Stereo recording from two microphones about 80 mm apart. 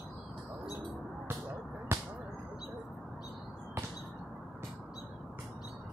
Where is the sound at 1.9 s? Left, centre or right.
Right.